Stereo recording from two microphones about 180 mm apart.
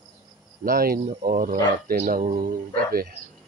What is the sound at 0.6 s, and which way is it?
Speech, 55° right (ahead or behind).